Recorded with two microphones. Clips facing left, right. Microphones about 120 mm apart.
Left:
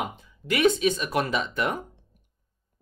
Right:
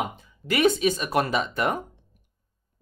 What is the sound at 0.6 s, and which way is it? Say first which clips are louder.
Speech: even; 5° right (ahead or behind).